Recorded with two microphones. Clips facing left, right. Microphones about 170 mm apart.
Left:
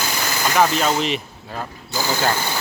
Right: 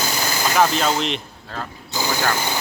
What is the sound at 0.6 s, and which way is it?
Speech, centre (ahead or behind).